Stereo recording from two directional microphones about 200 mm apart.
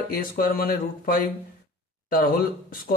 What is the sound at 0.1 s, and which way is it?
Speech, 50° left (ahead or behind).